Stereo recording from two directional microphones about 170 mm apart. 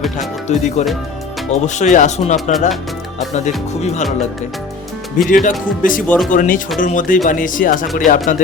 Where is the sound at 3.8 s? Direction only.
40° left (ahead or behind).